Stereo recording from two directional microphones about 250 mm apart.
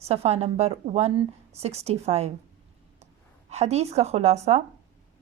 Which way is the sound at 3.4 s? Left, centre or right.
Right.